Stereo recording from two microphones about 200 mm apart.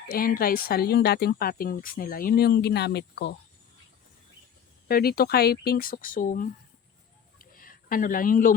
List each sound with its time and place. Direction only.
0.1 s speech: 45° left (ahead or behind)
4.9 s speech: 50° left (ahead or behind)
7.3 s a sound: 45° left (ahead or behind)